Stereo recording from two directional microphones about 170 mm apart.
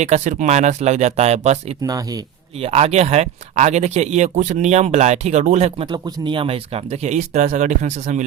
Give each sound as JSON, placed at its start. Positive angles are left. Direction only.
{"t": 0.0, "sound": "speech", "side_deg": -45}
{"t": 1.8, "sound": "speech", "side_deg": -20}
{"t": 2.6, "sound": "speech", "side_deg": -40}